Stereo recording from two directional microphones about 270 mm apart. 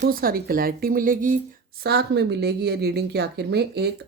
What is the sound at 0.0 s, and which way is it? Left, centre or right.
Speech, right.